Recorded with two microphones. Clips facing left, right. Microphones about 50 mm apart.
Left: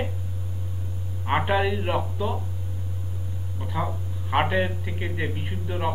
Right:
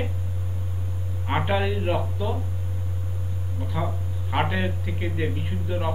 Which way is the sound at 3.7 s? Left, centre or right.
Centre.